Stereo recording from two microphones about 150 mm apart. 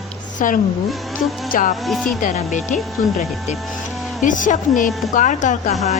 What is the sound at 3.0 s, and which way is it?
Speech, 65° left (ahead or behind).